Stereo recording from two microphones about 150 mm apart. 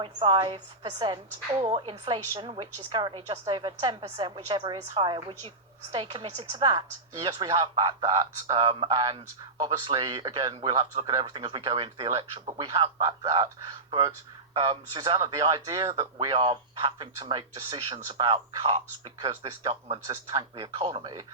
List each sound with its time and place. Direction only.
0.0 s speech: 35° right (ahead or behind)